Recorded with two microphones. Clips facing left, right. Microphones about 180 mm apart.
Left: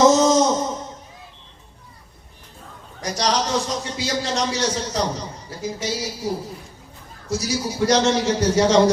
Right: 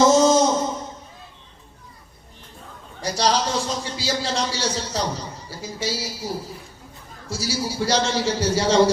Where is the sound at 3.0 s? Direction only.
30° right (ahead or behind).